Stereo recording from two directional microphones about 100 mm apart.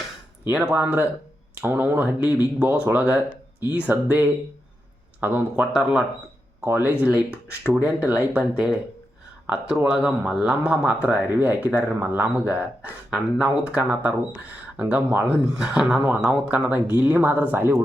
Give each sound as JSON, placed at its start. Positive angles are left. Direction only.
{"t": 0.4, "sound": "speech", "side_deg": -15}
{"t": 5.7, "sound": "speech", "side_deg": -5}
{"t": 6.7, "sound": "speech", "side_deg": -20}